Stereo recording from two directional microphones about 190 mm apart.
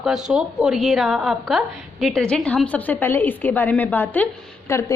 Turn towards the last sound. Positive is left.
turn(degrees=15)  # may be behind; listen again after turning